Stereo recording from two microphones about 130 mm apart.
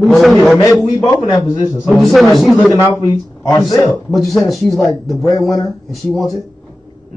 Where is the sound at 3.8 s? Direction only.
Centre (ahead or behind).